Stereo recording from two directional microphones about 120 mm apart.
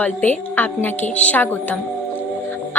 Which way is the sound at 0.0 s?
15° left (ahead or behind).